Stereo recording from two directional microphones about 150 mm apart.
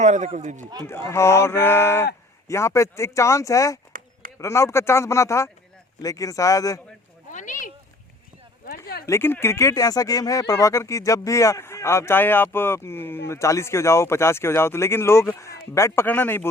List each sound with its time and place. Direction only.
0.0 s a man's voice: 50° right (ahead or behind)
0.9 s speech: 20° left (ahead or behind)
7.3 s a sound: 60° left (ahead or behind)
9.0 s speech: 15° left (ahead or behind)